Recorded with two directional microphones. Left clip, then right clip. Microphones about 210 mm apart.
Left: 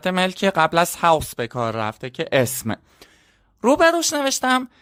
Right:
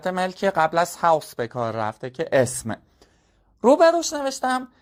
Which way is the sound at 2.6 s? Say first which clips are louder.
Left 3 dB; 20° left (ahead or behind).